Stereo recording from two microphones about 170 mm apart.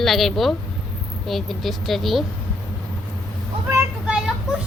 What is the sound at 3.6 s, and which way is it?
Vehicle, 5° right (ahead or behind).